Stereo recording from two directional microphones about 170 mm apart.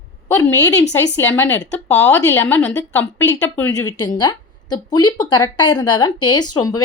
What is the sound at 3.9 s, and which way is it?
Speech, 25° left (ahead or behind).